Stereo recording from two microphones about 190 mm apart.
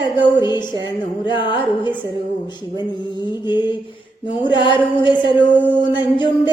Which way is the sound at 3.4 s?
25° left (ahead or behind).